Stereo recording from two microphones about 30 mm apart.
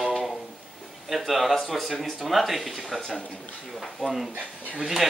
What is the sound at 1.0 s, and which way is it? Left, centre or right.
Speech, centre.